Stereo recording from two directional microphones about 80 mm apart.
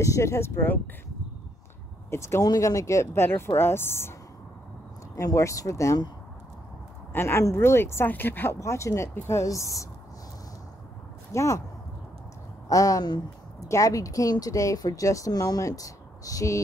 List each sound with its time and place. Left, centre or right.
0.0 s speech: left
2.0 s speech: left
2.4 s speech: left
5.1 s speech: left
7.1 s speech: left
8.5 s speech: left
11.3 s speech: left
12.6 s speech: left